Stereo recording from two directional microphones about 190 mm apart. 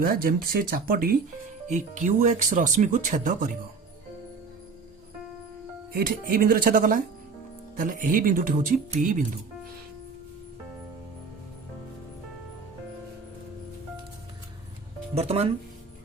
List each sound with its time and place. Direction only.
0.0 s speech: 50° right (ahead or behind)
5.9 s speech: 50° right (ahead or behind)
15.1 s speech: 35° right (ahead or behind)